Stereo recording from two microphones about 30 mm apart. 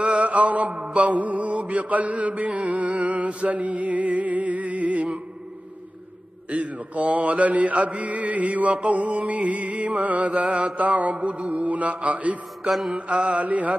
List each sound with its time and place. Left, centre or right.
0.2 s mantra: right
6.5 s mantra: right